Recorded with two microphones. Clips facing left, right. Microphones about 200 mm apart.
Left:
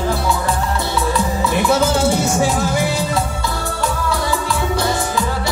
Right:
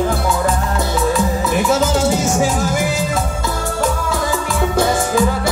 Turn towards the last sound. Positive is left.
turn(degrees=-50)  # may be behind; listen again after turning